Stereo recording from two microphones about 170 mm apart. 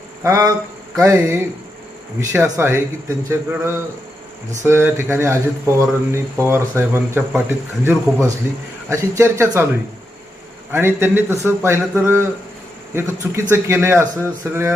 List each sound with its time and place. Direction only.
0.2 s a sound: 20° right (ahead or behind)
0.9 s speech: 20° right (ahead or behind)
10.7 s speech: 15° right (ahead or behind)